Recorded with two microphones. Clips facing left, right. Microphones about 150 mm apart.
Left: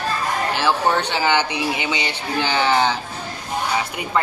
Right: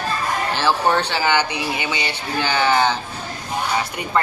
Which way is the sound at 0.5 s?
15° left (ahead or behind).